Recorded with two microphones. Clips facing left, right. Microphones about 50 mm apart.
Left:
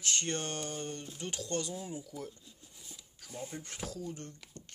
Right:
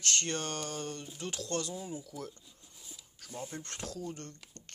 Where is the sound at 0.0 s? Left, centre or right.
Centre.